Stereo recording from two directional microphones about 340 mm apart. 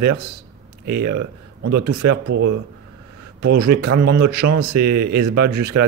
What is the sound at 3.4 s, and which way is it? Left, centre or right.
Speech, right.